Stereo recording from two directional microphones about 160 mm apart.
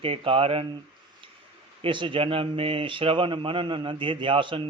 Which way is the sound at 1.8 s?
30° right (ahead or behind).